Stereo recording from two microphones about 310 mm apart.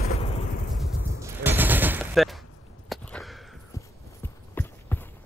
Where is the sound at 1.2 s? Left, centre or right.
Centre.